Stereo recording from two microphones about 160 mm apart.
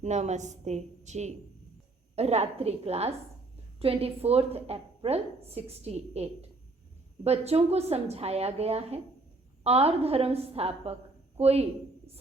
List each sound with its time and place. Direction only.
0.0 s a woman's voice: 45° right (ahead or behind)